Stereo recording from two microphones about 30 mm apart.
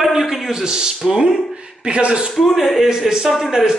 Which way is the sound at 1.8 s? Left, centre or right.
Right.